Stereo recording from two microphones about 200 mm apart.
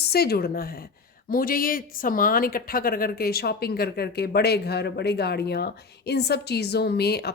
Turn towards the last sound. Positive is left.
turn(degrees=55)  # may be behind; listen again after turning